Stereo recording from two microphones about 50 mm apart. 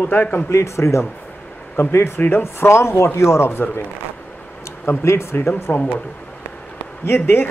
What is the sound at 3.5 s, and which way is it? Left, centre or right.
Speech, left.